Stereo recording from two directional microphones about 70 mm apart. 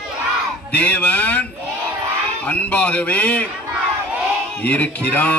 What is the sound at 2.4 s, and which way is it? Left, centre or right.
A man's voice, left.